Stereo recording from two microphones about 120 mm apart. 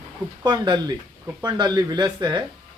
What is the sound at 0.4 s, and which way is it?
Speech, 35° right (ahead or behind).